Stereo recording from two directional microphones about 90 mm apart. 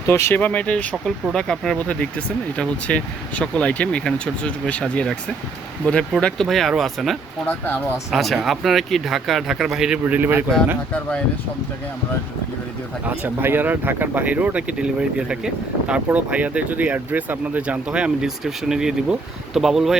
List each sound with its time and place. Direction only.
0.1 s speech: 25° left (ahead or behind); by 7.2 s centre (ahead or behind)
7.4 s speech: 20° left (ahead or behind)
8.1 s speech: centre (ahead or behind)
10.0 s speech: 20° right (ahead or behind)
13.1 s speech: 25° right (ahead or behind); by 20.0 s 5° right (ahead or behind)